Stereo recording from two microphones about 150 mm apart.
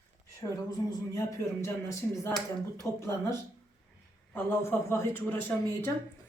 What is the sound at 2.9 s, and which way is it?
Speech, 15° left (ahead or behind).